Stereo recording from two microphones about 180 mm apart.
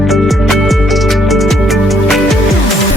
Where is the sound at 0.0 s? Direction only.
Centre (ahead or behind).